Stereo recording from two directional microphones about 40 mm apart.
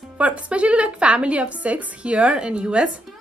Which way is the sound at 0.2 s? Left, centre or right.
Right.